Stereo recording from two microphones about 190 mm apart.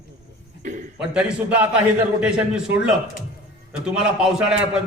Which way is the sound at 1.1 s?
5° right (ahead or behind).